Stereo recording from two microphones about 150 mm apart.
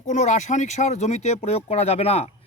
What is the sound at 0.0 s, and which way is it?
Speech, 55° left (ahead or behind).